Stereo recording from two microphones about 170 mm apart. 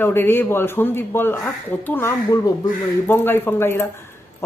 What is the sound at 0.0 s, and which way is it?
A man's voice, 10° left (ahead or behind).